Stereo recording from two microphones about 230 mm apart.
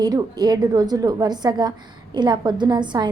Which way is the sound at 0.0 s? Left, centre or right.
Centre.